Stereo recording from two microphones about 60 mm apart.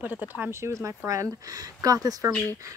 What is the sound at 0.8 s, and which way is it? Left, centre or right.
Speech, right.